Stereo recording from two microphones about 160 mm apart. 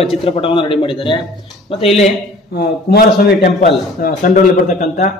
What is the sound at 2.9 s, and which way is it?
Speech, 80° left.